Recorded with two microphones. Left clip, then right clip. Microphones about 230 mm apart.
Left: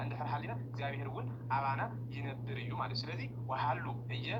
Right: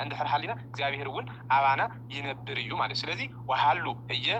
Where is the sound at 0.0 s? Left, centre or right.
Right.